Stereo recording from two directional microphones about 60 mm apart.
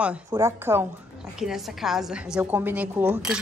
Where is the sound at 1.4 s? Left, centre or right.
Centre.